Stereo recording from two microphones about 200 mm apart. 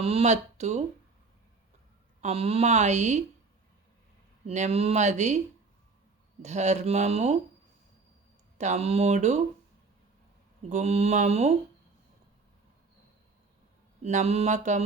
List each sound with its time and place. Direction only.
0.0 s speech: 30° right (ahead or behind)
2.2 s speech: 30° right (ahead or behind)
4.4 s speech: 35° right (ahead or behind)
6.4 s speech: 35° right (ahead or behind)
8.5 s speech: 35° right (ahead or behind)
10.7 s speech: 35° right (ahead or behind)
14.0 s speech: 35° right (ahead or behind)